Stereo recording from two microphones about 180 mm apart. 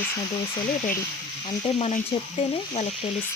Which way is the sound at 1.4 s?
25° left (ahead or behind).